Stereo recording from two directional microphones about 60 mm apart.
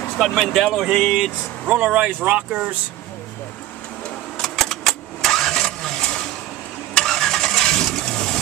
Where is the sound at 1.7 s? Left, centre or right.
Centre.